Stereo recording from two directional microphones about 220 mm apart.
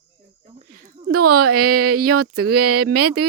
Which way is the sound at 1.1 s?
90° right.